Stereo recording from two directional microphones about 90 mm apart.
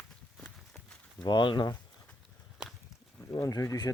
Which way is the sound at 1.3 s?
55° left (ahead or behind).